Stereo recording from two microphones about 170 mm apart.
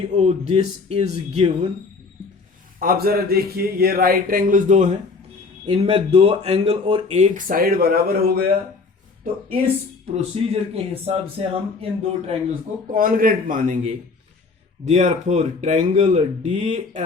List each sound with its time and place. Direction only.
0.0 s speech: 35° right (ahead or behind)
2.7 s speech: 60° right (ahead or behind)
5.6 s speech: 35° right (ahead or behind); by 8.4 s 60° right (ahead or behind)
10.1 s speech: 40° right (ahead or behind)
12.9 s speech: 55° right (ahead or behind); by 17.0 s 40° right (ahead or behind)